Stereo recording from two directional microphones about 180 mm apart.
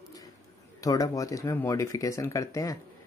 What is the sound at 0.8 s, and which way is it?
Speech, 20° left (ahead or behind).